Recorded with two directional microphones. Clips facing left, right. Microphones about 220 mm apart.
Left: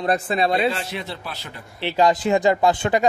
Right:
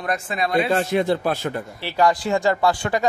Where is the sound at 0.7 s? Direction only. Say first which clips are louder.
Right 11 dB; 50° right (ahead or behind).